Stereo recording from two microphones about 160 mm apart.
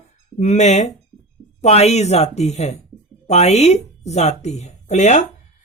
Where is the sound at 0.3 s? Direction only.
45° left (ahead or behind).